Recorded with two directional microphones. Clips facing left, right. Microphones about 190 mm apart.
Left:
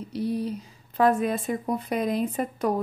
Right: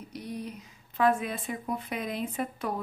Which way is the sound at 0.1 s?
30° left (ahead or behind).